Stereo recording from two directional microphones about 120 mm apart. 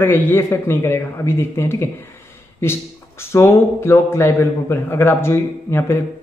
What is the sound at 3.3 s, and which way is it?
A man's voice, 20° left (ahead or behind).